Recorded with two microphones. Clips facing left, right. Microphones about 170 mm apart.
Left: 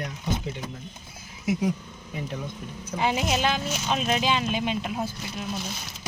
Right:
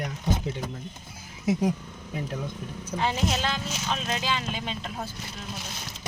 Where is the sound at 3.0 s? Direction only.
10° left (ahead or behind).